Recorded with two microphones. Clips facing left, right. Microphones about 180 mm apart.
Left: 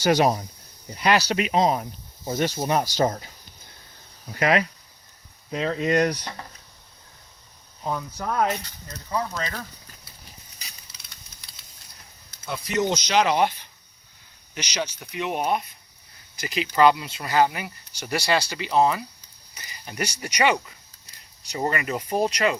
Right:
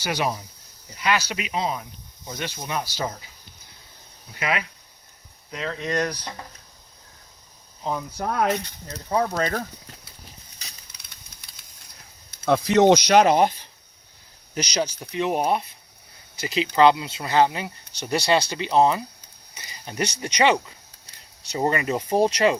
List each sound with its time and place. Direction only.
0.0 s speech: 45° left (ahead or behind)
0.9 s speech: 35° left (ahead or behind)
4.4 s speech: 45° left (ahead or behind)
5.5 s speech: 20° left (ahead or behind)
9.0 s speech: 55° right (ahead or behind)
12.5 s speech: 90° right; by 22.5 s 30° right (ahead or behind)